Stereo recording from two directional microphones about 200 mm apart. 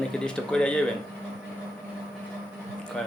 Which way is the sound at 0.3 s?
5° left (ahead or behind).